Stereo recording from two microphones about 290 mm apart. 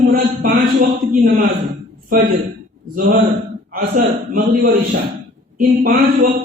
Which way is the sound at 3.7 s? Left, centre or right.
Right.